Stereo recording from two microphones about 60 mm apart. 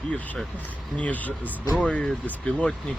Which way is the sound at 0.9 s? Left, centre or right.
Left.